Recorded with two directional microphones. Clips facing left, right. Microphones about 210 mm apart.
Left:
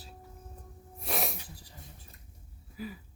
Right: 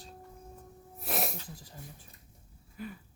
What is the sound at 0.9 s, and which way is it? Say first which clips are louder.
Sneeze: even; centre (ahead or behind).